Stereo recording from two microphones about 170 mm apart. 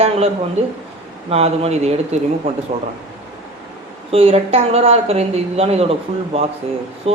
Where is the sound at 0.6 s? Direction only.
40° right (ahead or behind).